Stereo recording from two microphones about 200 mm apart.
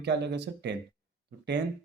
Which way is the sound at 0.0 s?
55° right (ahead or behind).